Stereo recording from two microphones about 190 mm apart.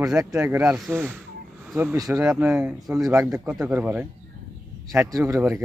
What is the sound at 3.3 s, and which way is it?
Speech, 15° right (ahead or behind).